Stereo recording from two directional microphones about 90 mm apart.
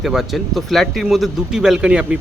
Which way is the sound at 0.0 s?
Centre (ahead or behind).